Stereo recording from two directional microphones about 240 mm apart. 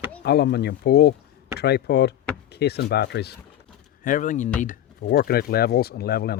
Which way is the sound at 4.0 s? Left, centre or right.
Left.